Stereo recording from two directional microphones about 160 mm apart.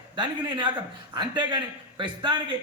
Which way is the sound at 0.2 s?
30° right (ahead or behind).